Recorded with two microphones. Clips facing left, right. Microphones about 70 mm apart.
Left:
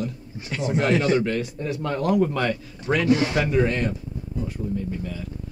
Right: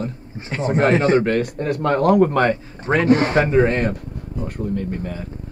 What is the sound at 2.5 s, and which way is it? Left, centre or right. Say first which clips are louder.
Speech: right 4 dB; right.